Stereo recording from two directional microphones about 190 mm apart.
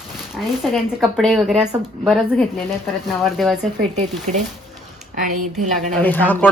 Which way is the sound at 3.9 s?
35° right (ahead or behind).